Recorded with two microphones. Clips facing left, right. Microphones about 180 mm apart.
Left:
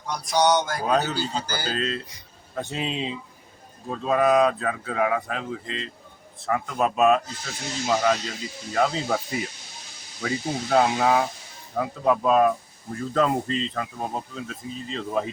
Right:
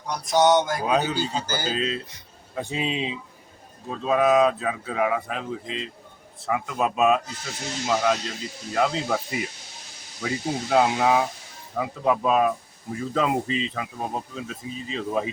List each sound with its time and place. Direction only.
0.3 s a sound: 20° right (ahead or behind)
0.9 s speech: 10° right (ahead or behind)
1.6 s speech: 5° right (ahead or behind)